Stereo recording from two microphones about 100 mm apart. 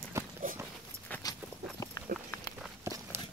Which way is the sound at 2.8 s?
30° right (ahead or behind).